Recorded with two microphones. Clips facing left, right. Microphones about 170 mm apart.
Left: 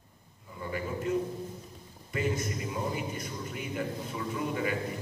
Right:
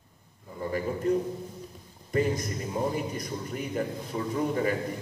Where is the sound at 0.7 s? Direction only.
40° right (ahead or behind).